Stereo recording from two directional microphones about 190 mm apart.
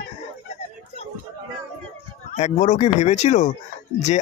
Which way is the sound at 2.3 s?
35° left (ahead or behind).